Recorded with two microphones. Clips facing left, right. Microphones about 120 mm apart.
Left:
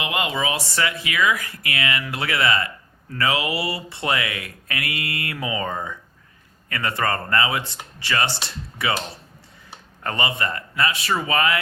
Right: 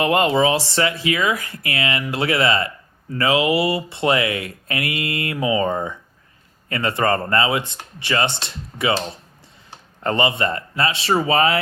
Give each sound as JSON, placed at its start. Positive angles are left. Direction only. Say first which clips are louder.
{"t": 0.0, "sound": "speech", "louder": "right 8 dB", "side_deg": -40}